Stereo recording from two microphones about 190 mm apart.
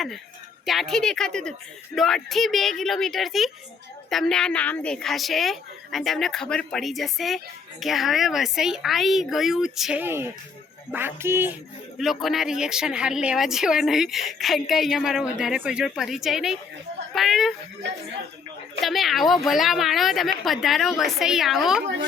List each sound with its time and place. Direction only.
0.6 s a woman's voice: centre (ahead or behind)
11.9 s a woman's voice: centre (ahead or behind)
17.8 s speech: 70° right (ahead or behind)
18.8 s a woman's voice: centre (ahead or behind)